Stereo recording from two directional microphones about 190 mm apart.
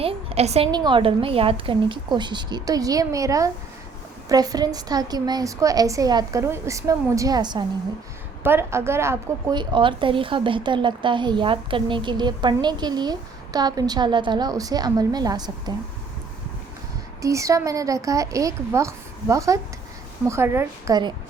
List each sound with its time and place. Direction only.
0.0 s a woman's voice: 30° right (ahead or behind)
17.2 s a woman's voice: 15° right (ahead or behind)